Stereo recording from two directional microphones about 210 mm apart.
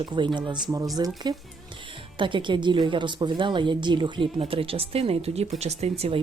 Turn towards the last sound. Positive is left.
turn(degrees=-30)  # may be behind; listen again after turning